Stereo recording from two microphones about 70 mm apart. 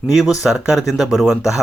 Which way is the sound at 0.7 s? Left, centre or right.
Centre.